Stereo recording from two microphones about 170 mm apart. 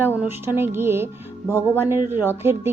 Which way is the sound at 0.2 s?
15° right (ahead or behind).